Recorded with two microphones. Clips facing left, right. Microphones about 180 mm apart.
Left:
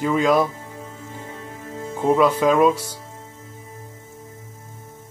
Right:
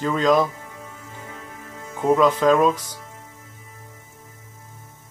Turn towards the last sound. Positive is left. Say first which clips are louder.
# left 6 dB
turn(degrees=30)  # may be behind; listen again after turning